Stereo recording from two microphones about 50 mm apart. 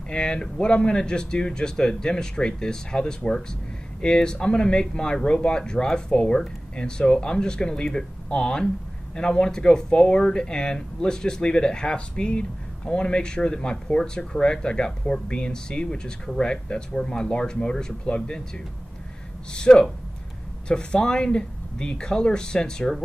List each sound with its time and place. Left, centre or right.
0.1 s speech: centre
19.5 s speech: centre